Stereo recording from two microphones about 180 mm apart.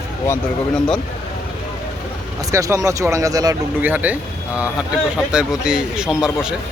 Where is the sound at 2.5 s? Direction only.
15° right (ahead or behind).